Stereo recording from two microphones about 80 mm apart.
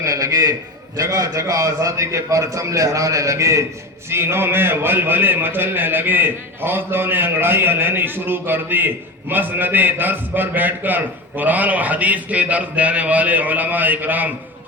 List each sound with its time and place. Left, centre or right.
0.0 s a man's voice: right